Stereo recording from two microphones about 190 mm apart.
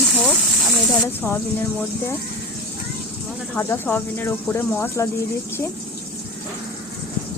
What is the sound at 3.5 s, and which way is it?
Speech, 10° left (ahead or behind).